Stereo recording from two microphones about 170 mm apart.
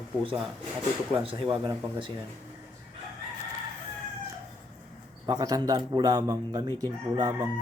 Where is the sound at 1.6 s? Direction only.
30° right (ahead or behind).